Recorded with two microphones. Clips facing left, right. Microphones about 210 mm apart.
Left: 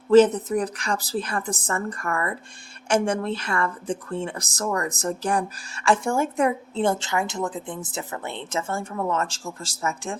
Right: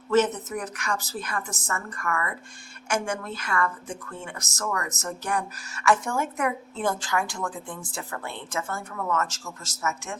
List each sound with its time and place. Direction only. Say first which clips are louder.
0.1 s a woman's voice: left 7 dB; 30° left (ahead or behind)